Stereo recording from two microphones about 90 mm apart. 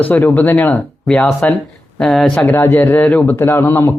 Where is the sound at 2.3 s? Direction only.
15° left (ahead or behind).